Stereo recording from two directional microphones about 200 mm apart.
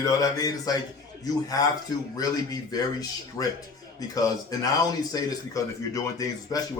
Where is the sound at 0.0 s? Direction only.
15° left (ahead or behind).